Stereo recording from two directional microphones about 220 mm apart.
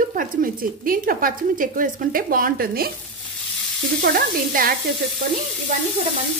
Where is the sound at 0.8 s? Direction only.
40° right (ahead or behind).